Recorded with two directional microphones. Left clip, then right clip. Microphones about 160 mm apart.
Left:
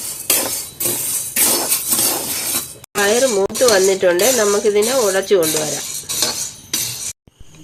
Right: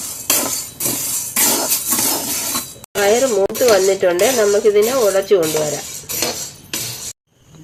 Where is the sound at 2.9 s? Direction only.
20° left (ahead or behind).